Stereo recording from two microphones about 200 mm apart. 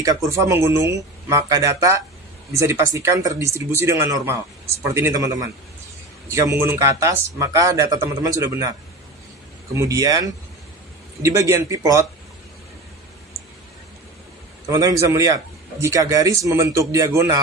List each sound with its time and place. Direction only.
0.0 s a man's voice: 15° right (ahead or behind)
9.8 s a man's voice: 15° right (ahead or behind)
14.7 s a man's voice: 15° right (ahead or behind)